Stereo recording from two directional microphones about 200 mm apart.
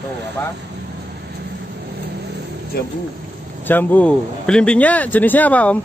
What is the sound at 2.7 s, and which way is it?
Speech, 50° left (ahead or behind).